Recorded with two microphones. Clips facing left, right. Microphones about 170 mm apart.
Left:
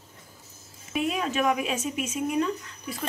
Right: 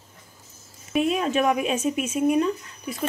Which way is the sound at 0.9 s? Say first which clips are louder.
Right 5 dB; 25° right (ahead or behind).